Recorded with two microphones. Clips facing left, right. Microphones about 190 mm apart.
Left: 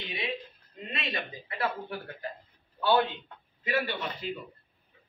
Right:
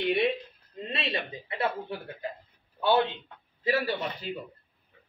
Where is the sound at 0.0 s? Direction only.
60° right (ahead or behind).